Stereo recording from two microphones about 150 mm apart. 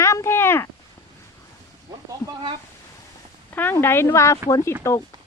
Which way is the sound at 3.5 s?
15° left (ahead or behind).